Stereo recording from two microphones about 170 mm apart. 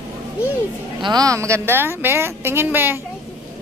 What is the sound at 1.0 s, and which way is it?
A woman's voice, 20° right (ahead or behind).